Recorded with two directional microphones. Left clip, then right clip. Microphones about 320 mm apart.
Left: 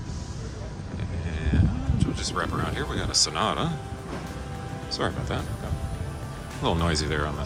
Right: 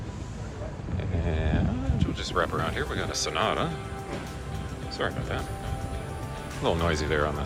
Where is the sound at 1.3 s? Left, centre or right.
Centre.